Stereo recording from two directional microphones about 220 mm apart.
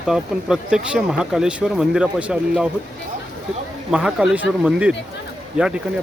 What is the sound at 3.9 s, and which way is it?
Speech, 5° right (ahead or behind).